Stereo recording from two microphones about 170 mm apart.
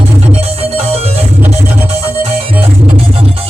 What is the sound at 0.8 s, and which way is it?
Music, 35° right (ahead or behind).